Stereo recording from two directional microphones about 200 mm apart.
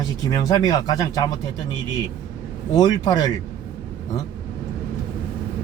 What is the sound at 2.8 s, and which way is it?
Speech, 20° left (ahead or behind).